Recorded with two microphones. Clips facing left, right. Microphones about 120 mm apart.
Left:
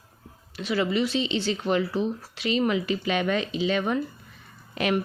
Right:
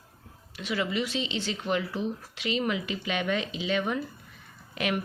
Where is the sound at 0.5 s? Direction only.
35° left (ahead or behind).